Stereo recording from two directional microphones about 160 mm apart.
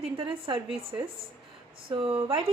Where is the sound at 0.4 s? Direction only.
35° right (ahead or behind).